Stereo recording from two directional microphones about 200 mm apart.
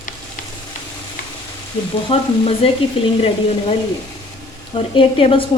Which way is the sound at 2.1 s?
30° left (ahead or behind).